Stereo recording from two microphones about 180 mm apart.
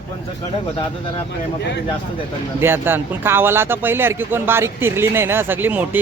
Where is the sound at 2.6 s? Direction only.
10° right (ahead or behind).